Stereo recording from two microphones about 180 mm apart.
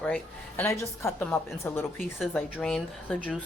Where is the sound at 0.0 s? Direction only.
10° left (ahead or behind).